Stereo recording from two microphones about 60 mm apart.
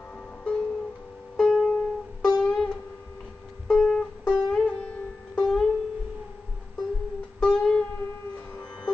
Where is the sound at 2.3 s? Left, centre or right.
Centre.